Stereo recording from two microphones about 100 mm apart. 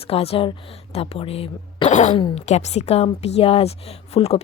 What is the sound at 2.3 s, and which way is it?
A woman's voice, 90° left.